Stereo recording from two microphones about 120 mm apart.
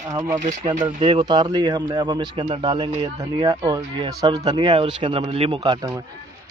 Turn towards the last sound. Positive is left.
turn(degrees=-50)  # may be behind; listen again after turning